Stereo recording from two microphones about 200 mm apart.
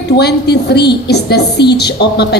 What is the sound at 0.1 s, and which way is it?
A woman's voice, 55° left (ahead or behind).